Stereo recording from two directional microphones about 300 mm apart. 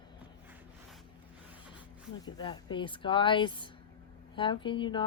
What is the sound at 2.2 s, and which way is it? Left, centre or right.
Speech, centre.